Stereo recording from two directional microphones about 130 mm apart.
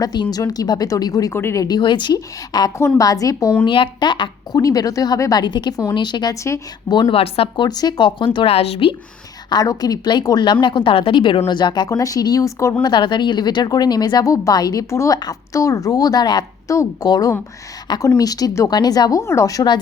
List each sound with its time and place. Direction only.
0.0 s speech: 30° left (ahead or behind)
1.6 s speech: 35° left (ahead or behind)
3.6 s speech: 40° left (ahead or behind)
7.1 s speech: 45° left (ahead or behind)
9.5 s speech: 30° left (ahead or behind)
12.8 s speech: 35° left (ahead or behind)